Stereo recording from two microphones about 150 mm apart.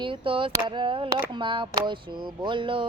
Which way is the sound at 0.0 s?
35° right (ahead or behind).